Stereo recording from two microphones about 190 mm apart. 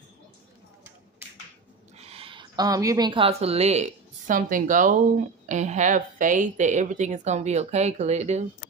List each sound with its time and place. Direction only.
2.0 s a woman's voice: 30° right (ahead or behind)